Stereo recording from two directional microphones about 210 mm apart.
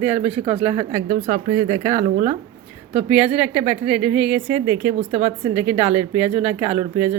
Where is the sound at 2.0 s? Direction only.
35° right (ahead or behind).